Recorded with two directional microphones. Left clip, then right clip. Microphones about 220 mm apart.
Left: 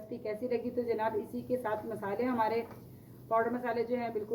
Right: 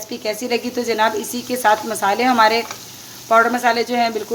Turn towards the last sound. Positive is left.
turn(degrees=-45)  # may be behind; listen again after turning